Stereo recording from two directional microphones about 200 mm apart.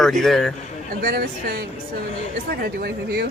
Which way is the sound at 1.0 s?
50° right (ahead or behind).